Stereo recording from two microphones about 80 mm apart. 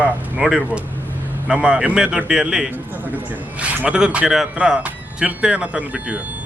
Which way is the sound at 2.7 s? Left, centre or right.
Right.